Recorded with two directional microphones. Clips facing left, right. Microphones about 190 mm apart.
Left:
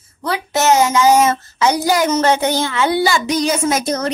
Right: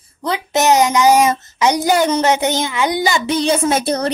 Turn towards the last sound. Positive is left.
turn(degrees=-30)  # may be behind; listen again after turning